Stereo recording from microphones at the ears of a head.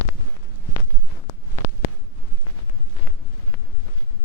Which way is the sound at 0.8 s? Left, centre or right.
Left.